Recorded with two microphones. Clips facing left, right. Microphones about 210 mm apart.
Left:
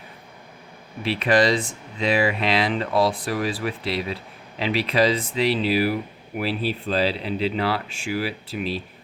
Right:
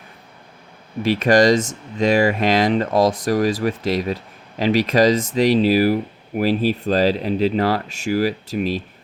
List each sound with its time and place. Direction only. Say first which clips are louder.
1.0 s speech: right 5 dB; 45° right (ahead or behind)